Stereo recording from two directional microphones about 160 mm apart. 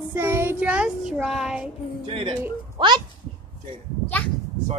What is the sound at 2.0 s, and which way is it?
Speech, 35° right (ahead or behind).